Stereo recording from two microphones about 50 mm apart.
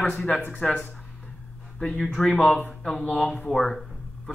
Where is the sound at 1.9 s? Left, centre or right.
Centre.